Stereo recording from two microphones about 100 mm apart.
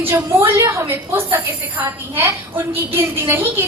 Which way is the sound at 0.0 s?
25° right (ahead or behind).